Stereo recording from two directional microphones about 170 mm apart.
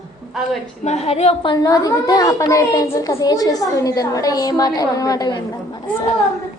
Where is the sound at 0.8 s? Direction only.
40° left (ahead or behind).